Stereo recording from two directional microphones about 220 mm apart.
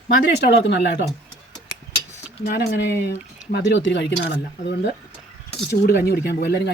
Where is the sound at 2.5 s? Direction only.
45° left (ahead or behind).